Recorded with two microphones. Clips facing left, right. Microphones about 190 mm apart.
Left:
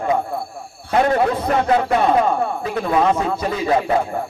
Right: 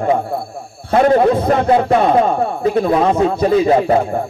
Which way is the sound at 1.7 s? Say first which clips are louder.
Right 3 dB; 25° right (ahead or behind).